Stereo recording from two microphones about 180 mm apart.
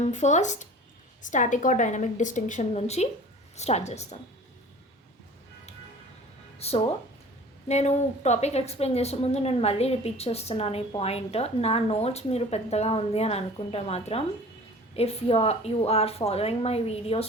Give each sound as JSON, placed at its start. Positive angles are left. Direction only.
{"t": 0.0, "sound": "a woman's voice", "side_deg": 40}
{"t": 6.6, "sound": "a woman's voice", "side_deg": 35}